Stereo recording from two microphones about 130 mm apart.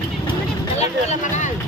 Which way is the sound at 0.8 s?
65° left (ahead or behind).